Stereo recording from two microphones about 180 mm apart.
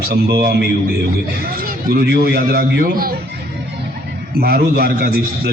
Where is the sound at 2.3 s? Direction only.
55° right (ahead or behind).